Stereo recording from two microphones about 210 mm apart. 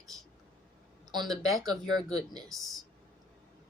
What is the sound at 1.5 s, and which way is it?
Speech, 20° right (ahead or behind).